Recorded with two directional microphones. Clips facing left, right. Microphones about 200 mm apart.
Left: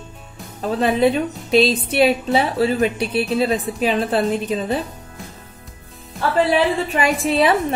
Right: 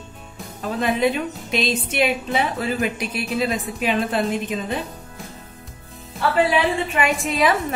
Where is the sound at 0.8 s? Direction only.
35° left (ahead or behind).